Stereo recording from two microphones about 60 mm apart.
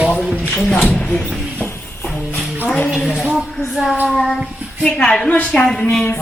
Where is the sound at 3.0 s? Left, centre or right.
Centre.